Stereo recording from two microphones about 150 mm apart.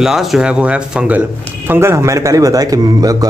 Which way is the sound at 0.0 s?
Centre (ahead or behind).